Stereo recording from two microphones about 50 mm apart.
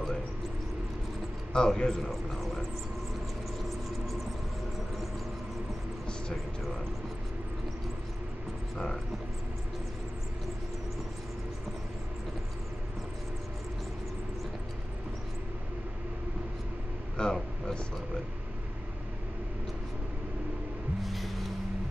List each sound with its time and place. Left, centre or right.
1.5 s speech: centre
17.2 s air conditioning: centre
21.0 s music: centre